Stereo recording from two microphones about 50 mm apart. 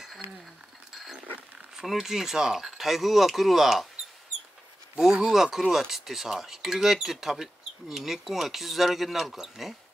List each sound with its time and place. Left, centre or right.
0.9 s a sound: centre
1.9 s speech: centre
5.0 s speech: centre